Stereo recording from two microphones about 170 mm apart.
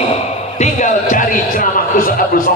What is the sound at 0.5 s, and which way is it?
Speech, 45° left (ahead or behind).